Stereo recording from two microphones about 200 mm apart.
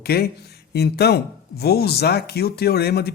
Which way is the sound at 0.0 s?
55° left (ahead or behind).